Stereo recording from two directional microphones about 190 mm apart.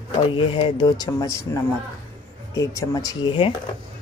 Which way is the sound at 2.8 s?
20° left (ahead or behind).